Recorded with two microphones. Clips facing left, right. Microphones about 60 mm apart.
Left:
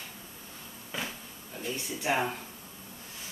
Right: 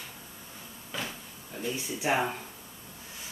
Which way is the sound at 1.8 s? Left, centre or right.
Centre.